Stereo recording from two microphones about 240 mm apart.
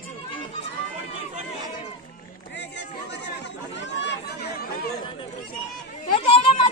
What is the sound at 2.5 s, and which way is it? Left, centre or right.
Run, left.